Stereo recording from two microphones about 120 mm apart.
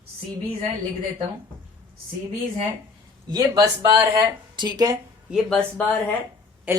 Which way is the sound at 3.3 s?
30° right (ahead or behind).